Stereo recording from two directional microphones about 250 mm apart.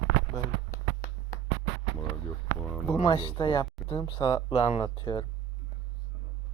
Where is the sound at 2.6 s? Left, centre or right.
Centre.